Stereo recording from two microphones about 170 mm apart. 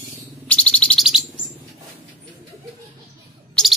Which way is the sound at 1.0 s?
5° right (ahead or behind).